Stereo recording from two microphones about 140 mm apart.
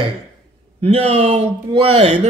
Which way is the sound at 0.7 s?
50° right (ahead or behind).